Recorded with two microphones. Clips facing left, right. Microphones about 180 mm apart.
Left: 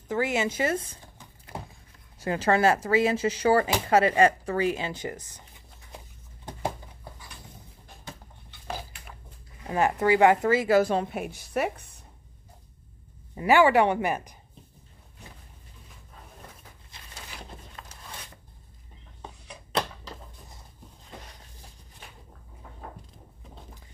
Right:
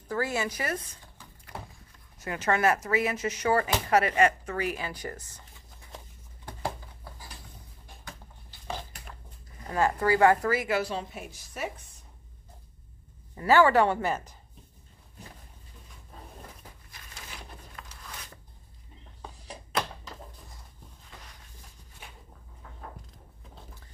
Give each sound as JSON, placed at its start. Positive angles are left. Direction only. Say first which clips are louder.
{"t": 0.1, "sound": "speech", "louder": "left 3 dB", "side_deg": 20}
{"t": 8.6, "sound": "a sound", "louder": "left 1 dB", "side_deg": 10}
{"t": 9.7, "sound": "speech", "louder": "left 2 dB", "side_deg": 20}
{"t": 10.7, "sound": "a woman's voice", "louder": "left 8 dB", "side_deg": 50}
{"t": 13.3, "sound": "speech", "louder": "left 1 dB", "side_deg": 15}
{"t": 17.8, "sound": "a sound", "louder": "even", "side_deg": 25}